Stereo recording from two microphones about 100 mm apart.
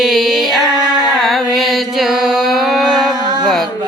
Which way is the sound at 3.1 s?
45° right (ahead or behind).